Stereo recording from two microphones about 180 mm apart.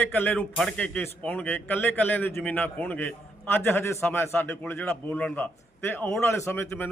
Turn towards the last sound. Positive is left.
turn(degrees=10)  # may be behind; listen again after turning